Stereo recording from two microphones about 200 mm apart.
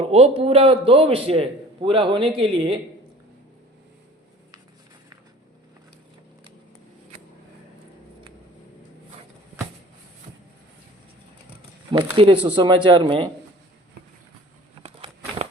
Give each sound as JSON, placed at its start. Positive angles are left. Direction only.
{"t": 0.1, "sound": "a man's voice", "side_deg": -30}
{"t": 11.9, "sound": "a man's voice", "side_deg": -25}
{"t": 14.8, "sound": "a sound", "side_deg": -30}